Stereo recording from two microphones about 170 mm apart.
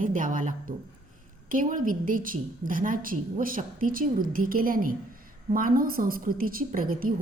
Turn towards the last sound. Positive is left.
turn(degrees=-55)  # may be behind; listen again after turning